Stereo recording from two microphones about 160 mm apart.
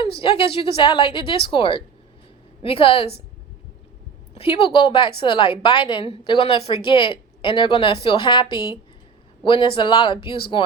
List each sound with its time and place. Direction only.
0.0 s a woman's voice: 35° left (ahead or behind)
4.4 s a woman's voice: 35° left (ahead or behind)